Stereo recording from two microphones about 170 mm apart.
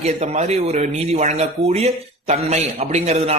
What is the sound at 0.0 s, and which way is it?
Speech, 40° right (ahead or behind).